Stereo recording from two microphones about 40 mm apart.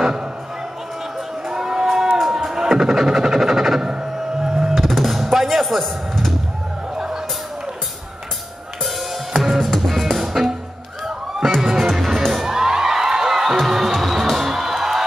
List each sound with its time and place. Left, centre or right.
1.5 s a sound: centre
2.1 s music: centre
4.8 s music: centre
9.3 s music: centre